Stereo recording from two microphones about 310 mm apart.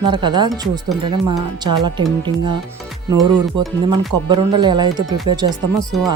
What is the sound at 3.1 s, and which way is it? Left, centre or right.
Speech, centre.